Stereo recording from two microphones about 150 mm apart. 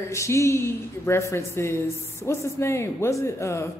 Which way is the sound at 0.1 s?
20° left (ahead or behind).